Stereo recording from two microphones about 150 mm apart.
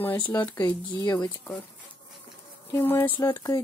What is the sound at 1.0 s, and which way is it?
Speech, 25° left (ahead or behind).